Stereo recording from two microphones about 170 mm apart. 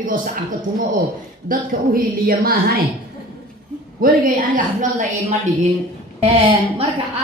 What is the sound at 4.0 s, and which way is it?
Speech, 50° right (ahead or behind).